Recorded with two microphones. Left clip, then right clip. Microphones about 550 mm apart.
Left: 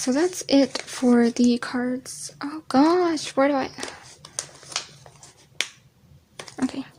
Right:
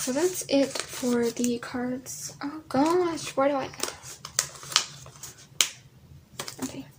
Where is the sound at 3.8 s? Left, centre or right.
Left.